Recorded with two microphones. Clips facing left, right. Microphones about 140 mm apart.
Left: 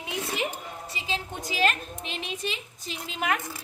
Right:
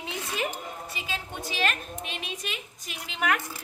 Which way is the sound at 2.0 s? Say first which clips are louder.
Left 6 dB; 30° left (ahead or behind).